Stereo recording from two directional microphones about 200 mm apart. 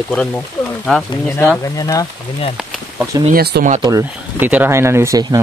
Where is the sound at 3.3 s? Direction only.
50° right (ahead or behind).